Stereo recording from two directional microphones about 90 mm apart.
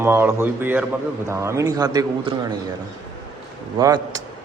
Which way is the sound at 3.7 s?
40° right (ahead or behind).